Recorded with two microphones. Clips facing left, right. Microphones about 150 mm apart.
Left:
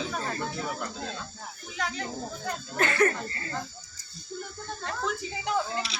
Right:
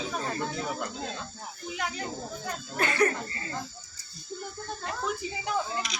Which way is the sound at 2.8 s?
20° right (ahead or behind).